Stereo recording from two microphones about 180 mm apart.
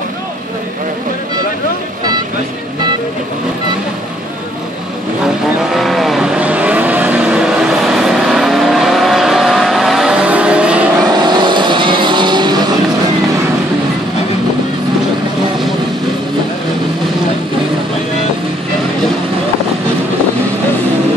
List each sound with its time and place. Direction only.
5.6 s vehicle: centre (ahead or behind)
11.1 s vehicle: 25° right (ahead or behind)